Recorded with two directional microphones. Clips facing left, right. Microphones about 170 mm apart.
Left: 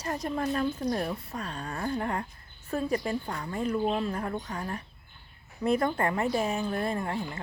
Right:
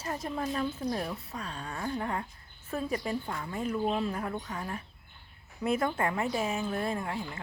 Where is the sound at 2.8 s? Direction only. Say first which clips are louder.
Left 4 dB; 40° left (ahead or behind).